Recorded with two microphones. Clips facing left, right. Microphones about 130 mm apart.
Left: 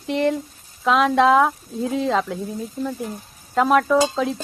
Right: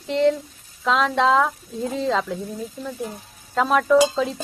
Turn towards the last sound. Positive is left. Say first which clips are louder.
# right 2 dB
turn(degrees=0)  # may be behind; listen again after turning